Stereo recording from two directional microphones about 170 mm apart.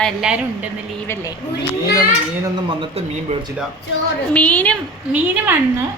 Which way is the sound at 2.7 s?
35° right (ahead or behind).